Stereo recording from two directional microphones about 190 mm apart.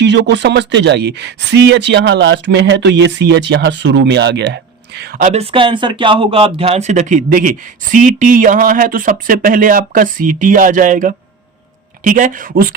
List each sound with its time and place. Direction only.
0.0 s speech: 65° right (ahead or behind)
5.2 s speech: 35° right (ahead or behind)